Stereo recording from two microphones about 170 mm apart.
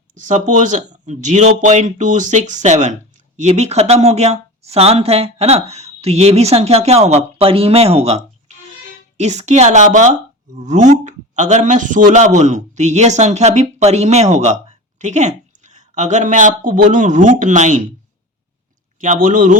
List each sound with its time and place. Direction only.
0.1 s speech: 45° right (ahead or behind)
18.9 s speech: 50° right (ahead or behind)